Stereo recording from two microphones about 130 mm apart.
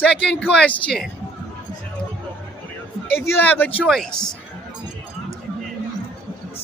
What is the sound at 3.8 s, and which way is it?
Speech, centre (ahead or behind).